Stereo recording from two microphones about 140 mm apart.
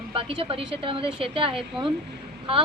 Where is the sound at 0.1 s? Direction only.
40° right (ahead or behind).